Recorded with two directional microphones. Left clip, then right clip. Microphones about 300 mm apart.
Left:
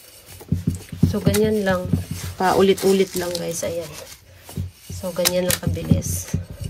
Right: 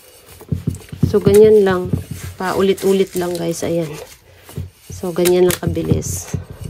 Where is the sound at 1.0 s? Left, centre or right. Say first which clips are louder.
Right 11 dB; centre.